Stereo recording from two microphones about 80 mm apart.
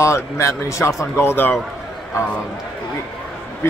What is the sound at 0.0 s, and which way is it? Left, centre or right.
Speech, left.